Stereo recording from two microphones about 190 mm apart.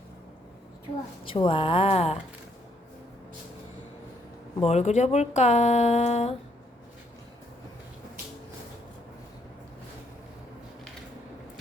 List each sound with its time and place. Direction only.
1.2 s a woman's voice: 25° left (ahead or behind)
4.6 s speech: 35° left (ahead or behind)